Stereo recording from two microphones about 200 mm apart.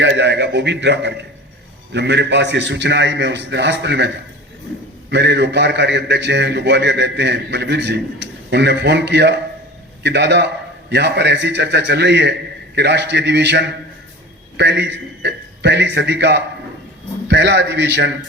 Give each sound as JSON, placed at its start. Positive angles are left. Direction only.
{"t": 0.0, "sound": "a sound", "side_deg": -60}
{"t": 1.9, "sound": "a man's voice", "side_deg": -60}
{"t": 5.1, "sound": "a man's voice", "side_deg": -60}